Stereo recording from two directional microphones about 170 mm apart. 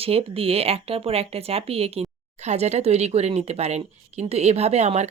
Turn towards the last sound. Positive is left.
turn(degrees=-40)  # may be behind; listen again after turning